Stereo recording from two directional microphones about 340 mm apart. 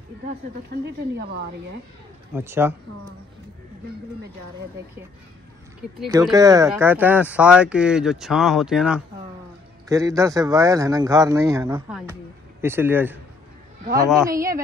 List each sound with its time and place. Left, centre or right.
0.7 s speech: right
2.3 s speech: centre
6.3 s speech: centre